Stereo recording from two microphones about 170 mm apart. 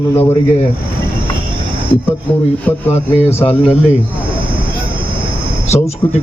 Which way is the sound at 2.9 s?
35° left (ahead or behind).